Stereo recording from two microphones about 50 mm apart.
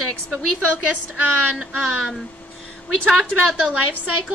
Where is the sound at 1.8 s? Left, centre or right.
Centre.